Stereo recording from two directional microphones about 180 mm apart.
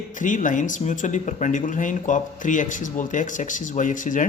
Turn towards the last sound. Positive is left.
turn(degrees=45)  # may be behind; listen again after turning